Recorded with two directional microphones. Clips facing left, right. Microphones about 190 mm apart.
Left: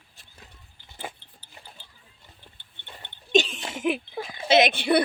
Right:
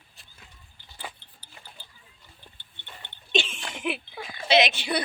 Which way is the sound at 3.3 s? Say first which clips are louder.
Left 6 dB; 40° left (ahead or behind).